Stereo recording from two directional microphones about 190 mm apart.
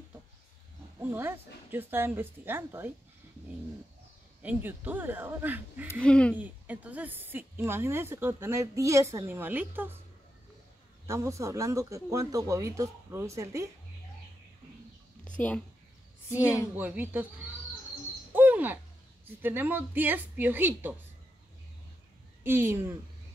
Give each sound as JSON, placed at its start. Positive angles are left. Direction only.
{"t": 0.9, "sound": "speech", "side_deg": -10}
{"t": 4.4, "sound": "speech", "side_deg": -10}
{"t": 6.0, "sound": "speech", "side_deg": 5}
{"t": 6.3, "sound": "speech", "side_deg": -10}
{"t": 11.1, "sound": "speech", "side_deg": -15}
{"t": 15.2, "sound": "a woman's voice", "side_deg": 5}
{"t": 16.7, "sound": "speech", "side_deg": -10}
{"t": 18.3, "sound": "owl", "side_deg": -10}
{"t": 19.2, "sound": "speech", "side_deg": -10}
{"t": 22.4, "sound": "speech", "side_deg": -10}